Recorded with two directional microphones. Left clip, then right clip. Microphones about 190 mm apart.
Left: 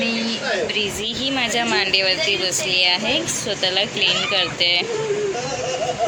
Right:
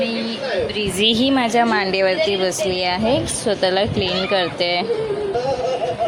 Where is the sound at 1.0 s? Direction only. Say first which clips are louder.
Right 5 dB; 55° right (ahead or behind).